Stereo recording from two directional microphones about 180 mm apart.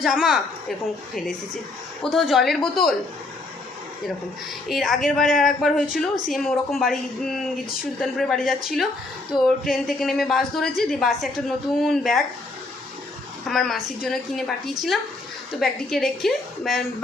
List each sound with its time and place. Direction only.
0.0 s a woman's voice: centre (ahead or behind)
2.0 s a woman's voice: centre (ahead or behind)
4.7 s a woman's voice: centre (ahead or behind)
13.5 s a woman's voice: centre (ahead or behind)